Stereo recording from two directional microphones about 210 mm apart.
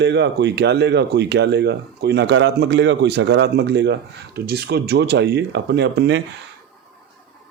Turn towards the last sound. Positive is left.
turn(degrees=-55)  # may be behind; listen again after turning